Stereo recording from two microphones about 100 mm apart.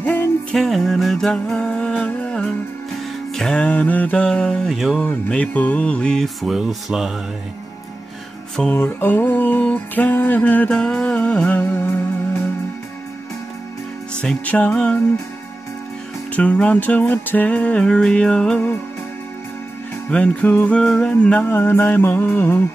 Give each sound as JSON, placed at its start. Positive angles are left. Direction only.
{"t": 0.0, "sound": "music", "side_deg": 15}
{"t": 0.6, "sound": "a sound", "side_deg": 0}
{"t": 2.2, "sound": "music", "side_deg": 5}
{"t": 5.3, "sound": "speech", "side_deg": 15}
{"t": 8.7, "sound": "music", "side_deg": 20}
{"t": 14.2, "sound": "music", "side_deg": 15}
{"t": 16.3, "sound": "music", "side_deg": 15}
{"t": 20.1, "sound": "music", "side_deg": 15}